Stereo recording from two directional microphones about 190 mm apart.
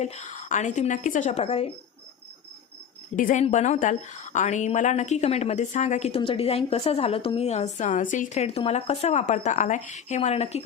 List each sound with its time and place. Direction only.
0.0 s a woman's voice: 35° left (ahead or behind)
3.2 s a woman's voice: 45° left (ahead or behind)